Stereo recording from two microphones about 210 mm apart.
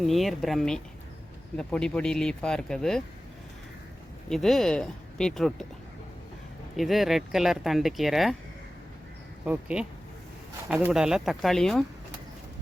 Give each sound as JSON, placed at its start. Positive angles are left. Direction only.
{"t": 0.0, "sound": "speech", "side_deg": 0}
{"t": 4.3, "sound": "speech", "side_deg": 0}
{"t": 6.7, "sound": "speech", "side_deg": 0}
{"t": 9.4, "sound": "speech", "side_deg": -5}